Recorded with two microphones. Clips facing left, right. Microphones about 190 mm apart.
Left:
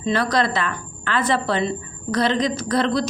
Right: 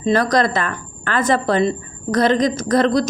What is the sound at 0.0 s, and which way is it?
A woman's voice, 45° right (ahead or behind).